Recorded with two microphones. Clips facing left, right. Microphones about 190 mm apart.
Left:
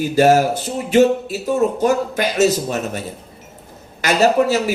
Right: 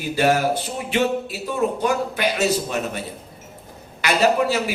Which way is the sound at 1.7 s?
45° left (ahead or behind).